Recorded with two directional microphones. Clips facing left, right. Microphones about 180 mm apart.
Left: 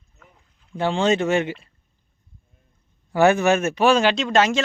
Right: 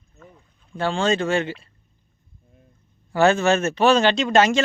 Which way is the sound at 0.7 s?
20° left (ahead or behind).